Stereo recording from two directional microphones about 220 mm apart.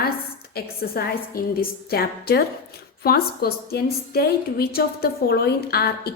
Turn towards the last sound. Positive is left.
turn(degrees=45)  # may be behind; listen again after turning